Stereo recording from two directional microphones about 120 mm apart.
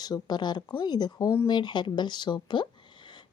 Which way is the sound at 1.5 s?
40° left (ahead or behind).